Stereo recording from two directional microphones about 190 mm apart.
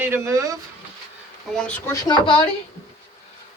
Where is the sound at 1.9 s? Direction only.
20° left (ahead or behind).